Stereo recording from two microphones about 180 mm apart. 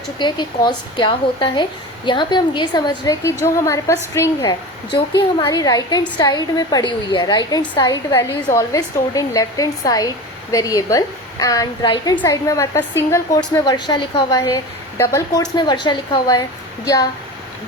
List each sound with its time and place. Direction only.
0.2 s a woman's voice: 25° left (ahead or behind)